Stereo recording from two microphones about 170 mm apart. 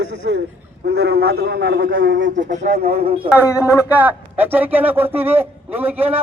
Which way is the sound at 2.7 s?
65° right (ahead or behind).